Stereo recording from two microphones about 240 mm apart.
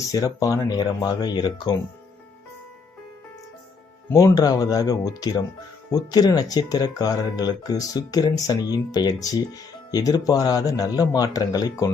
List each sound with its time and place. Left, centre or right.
0.1 s speech: centre
4.1 s speech: centre